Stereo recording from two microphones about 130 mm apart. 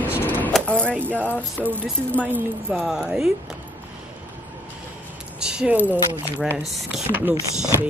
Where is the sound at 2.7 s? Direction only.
5° right (ahead or behind).